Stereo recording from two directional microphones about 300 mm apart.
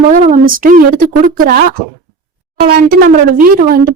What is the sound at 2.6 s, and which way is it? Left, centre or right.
A woman's voice, right.